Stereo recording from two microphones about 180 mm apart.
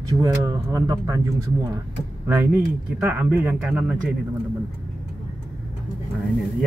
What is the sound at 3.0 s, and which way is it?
Speech, 10° right (ahead or behind).